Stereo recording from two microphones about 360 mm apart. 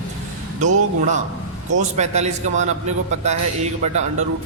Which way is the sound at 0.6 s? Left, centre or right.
Centre.